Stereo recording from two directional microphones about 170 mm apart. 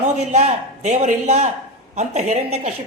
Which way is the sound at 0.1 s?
40° right (ahead or behind).